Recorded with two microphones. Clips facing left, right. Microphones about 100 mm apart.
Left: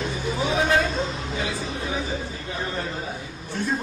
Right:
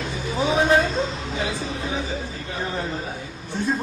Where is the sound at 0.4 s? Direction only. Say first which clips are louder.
Right 4 dB; 25° right (ahead or behind).